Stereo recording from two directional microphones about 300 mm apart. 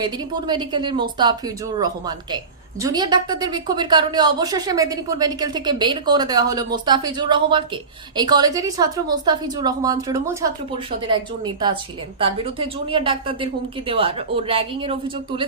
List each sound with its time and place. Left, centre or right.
0.0 s a woman's voice: centre